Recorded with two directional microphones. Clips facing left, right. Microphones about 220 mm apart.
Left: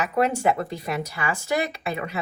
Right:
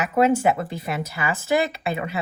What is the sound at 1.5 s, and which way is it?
Speech, 30° right (ahead or behind).